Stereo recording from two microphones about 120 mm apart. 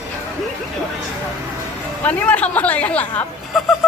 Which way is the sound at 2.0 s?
10° left (ahead or behind).